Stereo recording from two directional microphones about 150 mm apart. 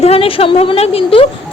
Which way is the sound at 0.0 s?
40° left (ahead or behind).